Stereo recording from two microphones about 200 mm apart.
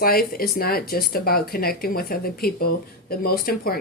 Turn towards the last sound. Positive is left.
turn(degrees=50)  # may be behind; listen again after turning